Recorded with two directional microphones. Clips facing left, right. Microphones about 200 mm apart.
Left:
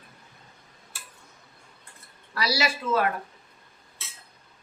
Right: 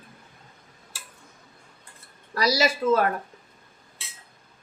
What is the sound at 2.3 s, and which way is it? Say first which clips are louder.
Speech: right 5 dB; 40° right (ahead or behind).